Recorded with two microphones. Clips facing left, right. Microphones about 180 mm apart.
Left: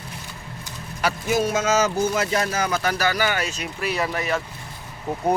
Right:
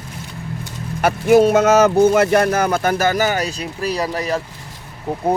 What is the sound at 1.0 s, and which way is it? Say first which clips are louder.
Speech: right 10 dB; 55° right (ahead or behind).